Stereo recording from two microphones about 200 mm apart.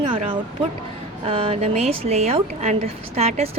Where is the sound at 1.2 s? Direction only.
30° right (ahead or behind).